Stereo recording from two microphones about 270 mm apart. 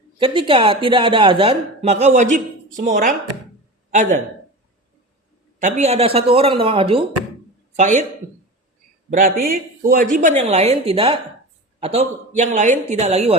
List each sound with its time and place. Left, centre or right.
0.2 s speech: centre
5.5 s speech: right
9.0 s speech: right